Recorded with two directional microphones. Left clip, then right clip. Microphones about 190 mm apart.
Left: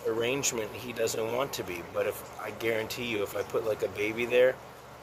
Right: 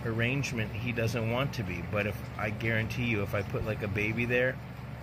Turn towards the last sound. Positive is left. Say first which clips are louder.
# left 4 dB
turn(degrees=20)  # may be behind; listen again after turning